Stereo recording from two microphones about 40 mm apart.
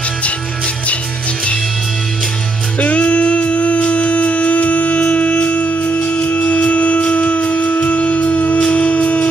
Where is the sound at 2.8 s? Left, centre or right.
Left.